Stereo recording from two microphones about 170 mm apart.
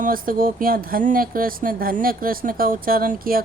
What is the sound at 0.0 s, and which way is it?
Speech, 55° right (ahead or behind).